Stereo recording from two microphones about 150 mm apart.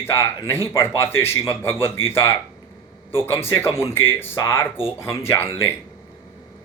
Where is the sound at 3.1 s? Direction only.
15° left (ahead or behind).